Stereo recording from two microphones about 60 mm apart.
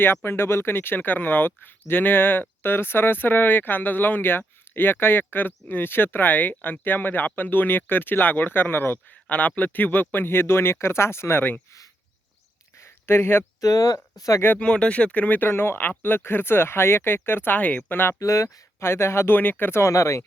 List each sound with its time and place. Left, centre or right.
0.0 s speech: left
9.2 s speech: left
12.8 s a sound: left
13.6 s speech: left
14.6 s speech: centre; by 18.1 s left
18.2 s speech: left
18.8 s speech: left
19.4 s speech: left
19.8 s speech: left